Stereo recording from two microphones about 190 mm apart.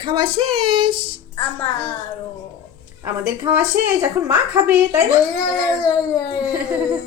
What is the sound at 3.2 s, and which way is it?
A woman's voice, 10° right (ahead or behind).